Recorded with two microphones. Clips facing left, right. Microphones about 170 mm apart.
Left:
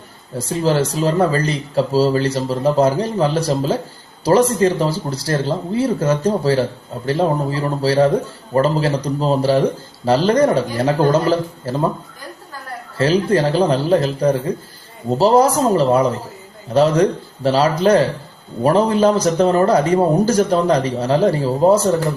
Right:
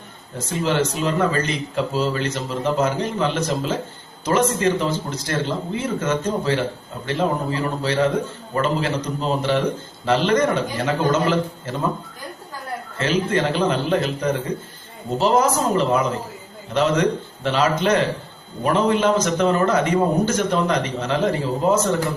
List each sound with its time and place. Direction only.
0.3 s speech: 35° left (ahead or behind)
13.0 s speech: 35° left (ahead or behind)